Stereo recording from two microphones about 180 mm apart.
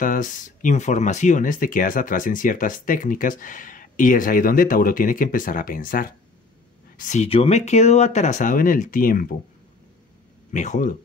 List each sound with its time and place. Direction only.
0.0 s speech: 45° left (ahead or behind)
7.0 s speech: 40° left (ahead or behind)
10.5 s speech: 45° left (ahead or behind)